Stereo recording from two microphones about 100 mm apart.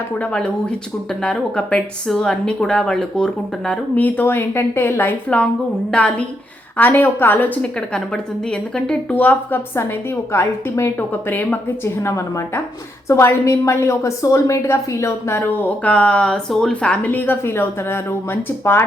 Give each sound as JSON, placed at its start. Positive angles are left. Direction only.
{"t": 0.2, "sound": "a woman's voice", "side_deg": 10}
{"t": 13.1, "sound": "a woman's voice", "side_deg": 30}